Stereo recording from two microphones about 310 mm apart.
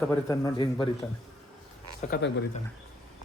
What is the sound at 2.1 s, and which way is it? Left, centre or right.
Speech, left.